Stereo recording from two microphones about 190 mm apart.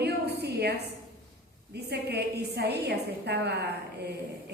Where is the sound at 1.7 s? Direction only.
60° right (ahead or behind).